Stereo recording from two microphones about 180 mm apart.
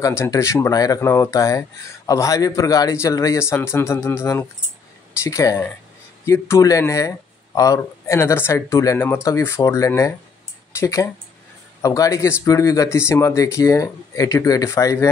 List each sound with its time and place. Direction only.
0.0 s speech: 15° left (ahead or behind)